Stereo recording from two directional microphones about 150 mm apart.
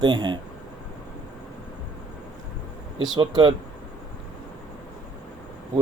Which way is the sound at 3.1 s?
30° right (ahead or behind).